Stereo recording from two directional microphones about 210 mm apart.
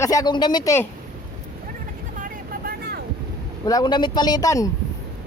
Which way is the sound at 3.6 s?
20° left (ahead or behind).